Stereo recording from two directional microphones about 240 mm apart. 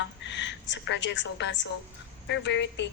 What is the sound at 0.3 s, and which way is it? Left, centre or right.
A woman's voice, left.